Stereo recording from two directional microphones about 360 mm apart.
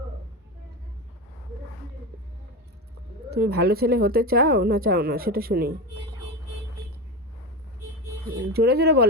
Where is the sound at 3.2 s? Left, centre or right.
Right.